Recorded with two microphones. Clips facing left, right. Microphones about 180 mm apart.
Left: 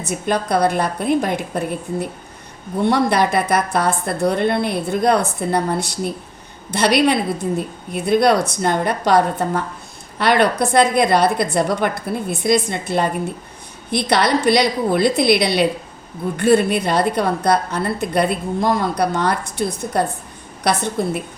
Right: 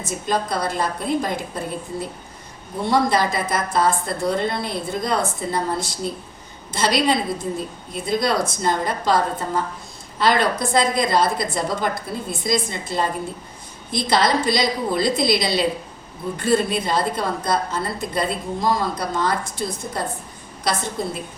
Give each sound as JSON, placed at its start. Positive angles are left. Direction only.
{"t": 0.1, "sound": "a woman's voice", "side_deg": 65}